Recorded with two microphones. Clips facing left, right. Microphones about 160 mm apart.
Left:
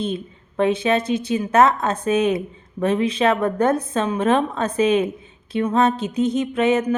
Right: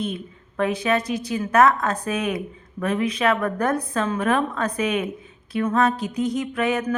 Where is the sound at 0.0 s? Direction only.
25° left (ahead or behind).